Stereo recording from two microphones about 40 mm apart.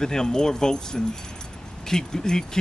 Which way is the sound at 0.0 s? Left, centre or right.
Centre.